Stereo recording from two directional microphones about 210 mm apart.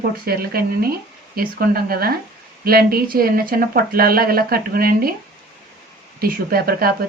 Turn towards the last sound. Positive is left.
turn(degrees=-45)  # may be behind; listen again after turning